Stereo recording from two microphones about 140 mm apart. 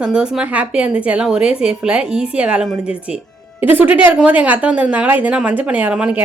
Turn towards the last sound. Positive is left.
turn(degrees=-10)  # may be behind; listen again after turning